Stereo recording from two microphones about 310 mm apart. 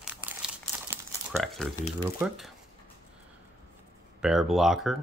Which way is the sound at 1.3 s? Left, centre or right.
Centre.